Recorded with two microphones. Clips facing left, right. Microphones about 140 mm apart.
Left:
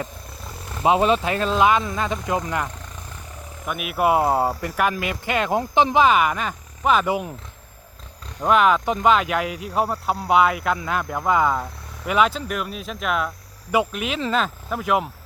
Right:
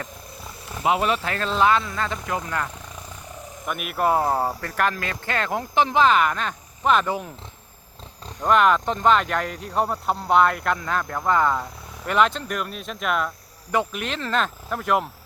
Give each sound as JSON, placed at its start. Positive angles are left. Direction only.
{"t": 0.9, "sound": "speech", "side_deg": 25}
{"t": 3.7, "sound": "speech", "side_deg": 0}
{"t": 8.4, "sound": "speech", "side_deg": 5}